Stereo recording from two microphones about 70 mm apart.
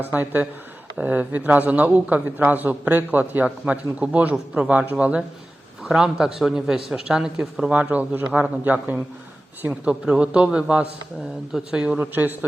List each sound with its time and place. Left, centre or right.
0.1 s a man's voice: right
9.9 s a man's voice: centre
11.9 s a man's voice: right